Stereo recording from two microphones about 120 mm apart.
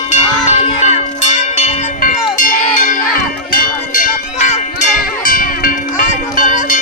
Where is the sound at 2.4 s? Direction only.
90° left.